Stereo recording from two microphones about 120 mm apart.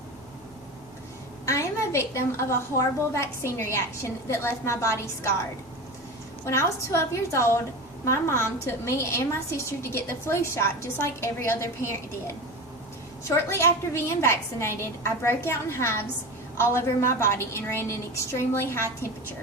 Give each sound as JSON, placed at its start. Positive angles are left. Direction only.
{"t": 1.5, "sound": "a woman's voice", "side_deg": 25}
{"t": 6.4, "sound": "a woman's voice", "side_deg": 20}